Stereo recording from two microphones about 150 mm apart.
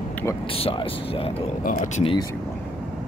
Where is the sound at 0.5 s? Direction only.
40° left (ahead or behind).